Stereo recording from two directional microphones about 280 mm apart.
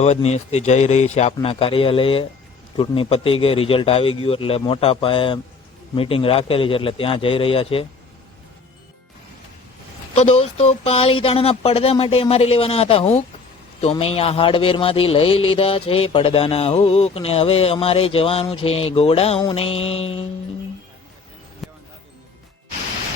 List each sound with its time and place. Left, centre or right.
0.0 s speech: left
10.2 s speech: left
21.6 s music: centre